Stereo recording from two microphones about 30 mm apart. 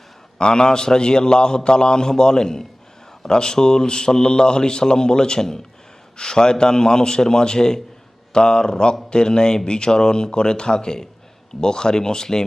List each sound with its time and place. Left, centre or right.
0.3 s speech: left